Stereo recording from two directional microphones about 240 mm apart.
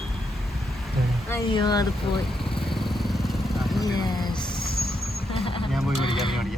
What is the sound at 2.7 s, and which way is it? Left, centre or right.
Vehicle, centre.